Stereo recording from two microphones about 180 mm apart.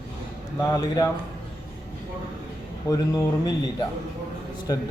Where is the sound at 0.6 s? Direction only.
20° left (ahead or behind).